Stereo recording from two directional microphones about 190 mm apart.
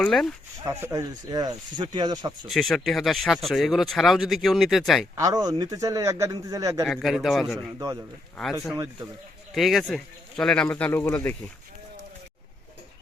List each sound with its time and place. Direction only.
0.0 s speech: 5° left (ahead or behind)
0.6 s speech: 15° right (ahead or behind)
2.5 s speech: centre (ahead or behind)
5.1 s a man's voice: 20° right (ahead or behind)
6.8 s speech: centre (ahead or behind)
7.8 s a man's voice: 15° right (ahead or behind)
9.6 s speech: centre (ahead or behind)